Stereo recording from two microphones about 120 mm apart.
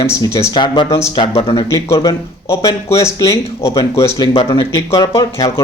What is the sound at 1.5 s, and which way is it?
Speech, 30° left (ahead or behind).